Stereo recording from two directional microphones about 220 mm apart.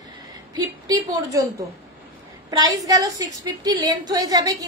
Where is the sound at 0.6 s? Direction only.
15° right (ahead or behind).